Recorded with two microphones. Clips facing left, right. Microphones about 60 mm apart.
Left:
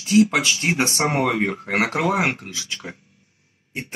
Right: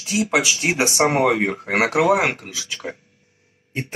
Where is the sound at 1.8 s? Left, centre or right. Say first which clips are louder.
Right 6 dB; centre.